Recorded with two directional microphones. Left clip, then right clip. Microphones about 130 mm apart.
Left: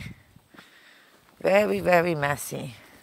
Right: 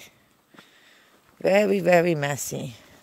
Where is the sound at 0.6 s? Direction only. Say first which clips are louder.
Left 1 dB; 90° right; by 2.4 s 70° right (ahead or behind).